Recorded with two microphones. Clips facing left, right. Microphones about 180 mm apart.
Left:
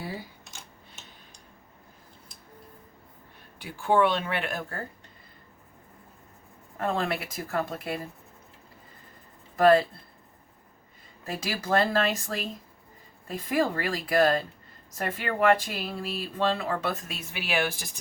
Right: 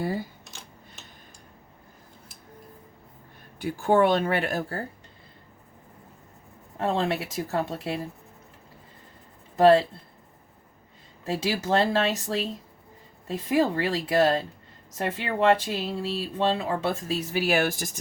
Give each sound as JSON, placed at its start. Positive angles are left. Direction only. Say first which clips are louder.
{"t": 0.4, "sound": "a sound", "louder": "right 2 dB", "side_deg": 0}
{"t": 3.6, "sound": "speech", "louder": "right 2 dB", "side_deg": -40}
{"t": 6.7, "sound": "speech", "louder": "right 3 dB", "side_deg": -25}
{"t": 9.6, "sound": "speech", "louder": "right 2 dB", "side_deg": -25}
{"t": 11.3, "sound": "speech", "louder": "right 3 dB", "side_deg": -25}
{"t": 17.3, "sound": "speech", "louder": "right 4 dB", "side_deg": -40}